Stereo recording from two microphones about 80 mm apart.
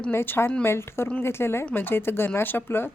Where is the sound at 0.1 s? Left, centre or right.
Left.